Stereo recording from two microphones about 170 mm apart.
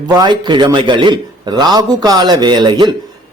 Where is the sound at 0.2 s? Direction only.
25° right (ahead or behind).